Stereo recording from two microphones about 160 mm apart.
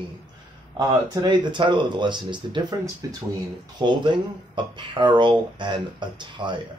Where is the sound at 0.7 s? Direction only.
25° right (ahead or behind).